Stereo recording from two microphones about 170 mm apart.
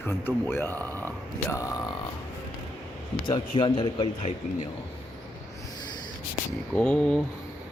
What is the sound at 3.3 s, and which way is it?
Speech, 30° left (ahead or behind).